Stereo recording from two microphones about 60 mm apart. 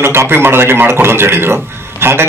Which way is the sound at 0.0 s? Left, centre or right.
Right.